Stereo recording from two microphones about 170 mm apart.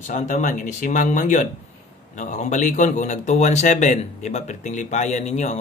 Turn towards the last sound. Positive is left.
turn(degrees=40)  # may be behind; listen again after turning